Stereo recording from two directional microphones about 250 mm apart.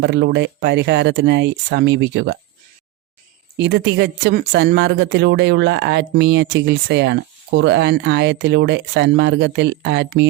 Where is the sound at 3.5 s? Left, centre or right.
Right.